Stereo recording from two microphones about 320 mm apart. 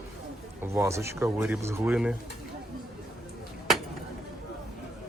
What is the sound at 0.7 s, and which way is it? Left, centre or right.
Speech, centre.